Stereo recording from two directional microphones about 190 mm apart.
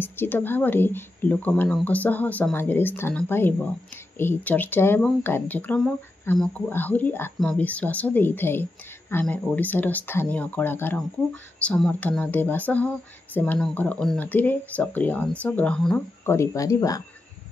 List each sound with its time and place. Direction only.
0.0 s speech: 10° left (ahead or behind)
16.3 s speech: 15° left (ahead or behind)